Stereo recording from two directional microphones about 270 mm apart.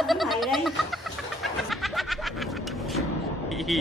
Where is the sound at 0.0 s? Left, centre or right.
Centre.